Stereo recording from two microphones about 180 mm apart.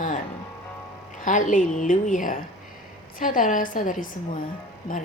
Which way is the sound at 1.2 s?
45° left (ahead or behind).